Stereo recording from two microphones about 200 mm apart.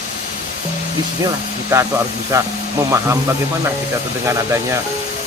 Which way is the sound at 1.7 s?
10° right (ahead or behind).